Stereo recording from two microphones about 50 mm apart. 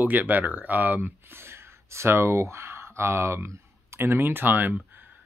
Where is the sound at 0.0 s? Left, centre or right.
Right.